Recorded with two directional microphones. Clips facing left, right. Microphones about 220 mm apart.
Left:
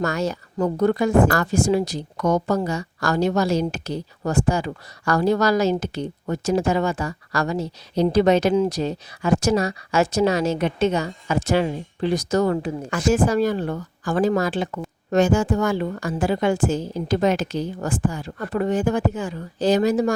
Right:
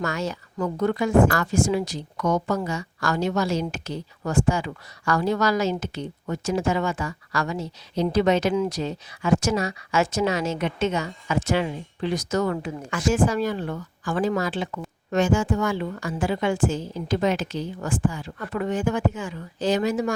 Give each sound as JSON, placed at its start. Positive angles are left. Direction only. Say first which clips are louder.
{"t": 0.0, "sound": "speech", "louder": "left 4 dB", "side_deg": 40}